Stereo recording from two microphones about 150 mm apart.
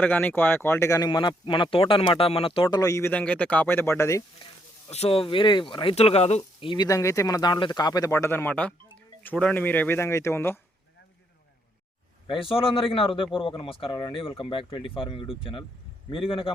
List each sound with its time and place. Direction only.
0.0 s speech: 10° left (ahead or behind)
4.4 s a man's voice: 35° left (ahead or behind)
6.8 s speech: 20° left (ahead or behind)
12.3 s a man's voice: 35° left (ahead or behind)